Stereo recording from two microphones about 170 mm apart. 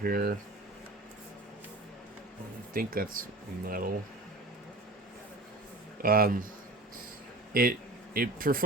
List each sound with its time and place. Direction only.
0.0 s speech: 60° right (ahead or behind)
2.7 s speech: 55° right (ahead or behind)
6.0 s speech: 60° right (ahead or behind)
7.5 s speech: 60° right (ahead or behind)